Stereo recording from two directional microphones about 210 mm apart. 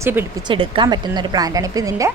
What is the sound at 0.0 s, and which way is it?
Speech, 10° right (ahead or behind).